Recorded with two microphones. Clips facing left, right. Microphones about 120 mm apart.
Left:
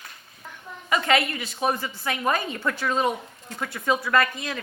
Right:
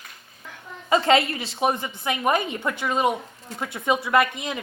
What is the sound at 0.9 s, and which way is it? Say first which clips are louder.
A woman's voice: right 4 dB; 25° right (ahead or behind).